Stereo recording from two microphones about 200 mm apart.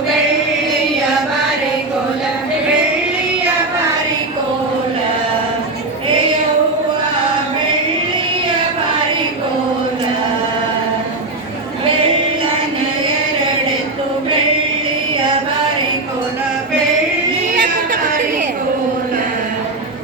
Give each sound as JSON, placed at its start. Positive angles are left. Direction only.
{"t": 17.5, "sound": "chatter", "side_deg": -45}